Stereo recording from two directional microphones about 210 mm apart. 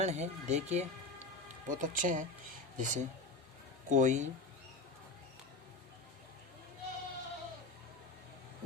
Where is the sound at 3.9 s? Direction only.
35° right (ahead or behind).